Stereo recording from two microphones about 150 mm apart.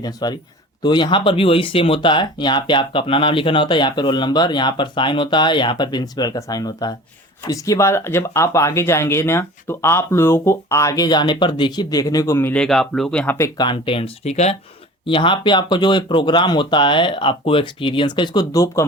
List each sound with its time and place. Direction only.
0.0 s a man's voice: 25° left (ahead or behind)
12.6 s speech: 5° left (ahead or behind)
13.6 s speech: 35° left (ahead or behind)
15.0 s speech: 35° left (ahead or behind)